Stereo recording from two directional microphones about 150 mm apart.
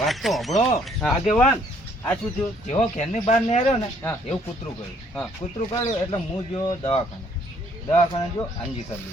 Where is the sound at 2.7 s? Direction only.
50° left (ahead or behind).